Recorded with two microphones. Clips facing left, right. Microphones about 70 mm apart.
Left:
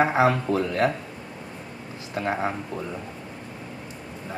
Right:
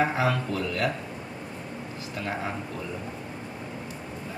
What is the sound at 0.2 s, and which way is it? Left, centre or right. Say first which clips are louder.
Speech: left 5 dB; left.